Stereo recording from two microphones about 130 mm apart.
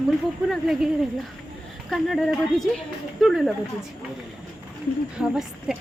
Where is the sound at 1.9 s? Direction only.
Centre (ahead or behind).